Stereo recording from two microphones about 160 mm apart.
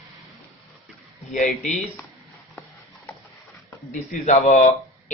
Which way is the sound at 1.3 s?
50° left (ahead or behind).